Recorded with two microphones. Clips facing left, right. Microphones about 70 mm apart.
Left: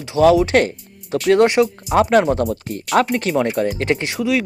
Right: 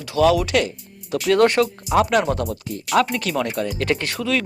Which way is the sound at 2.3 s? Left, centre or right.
Left.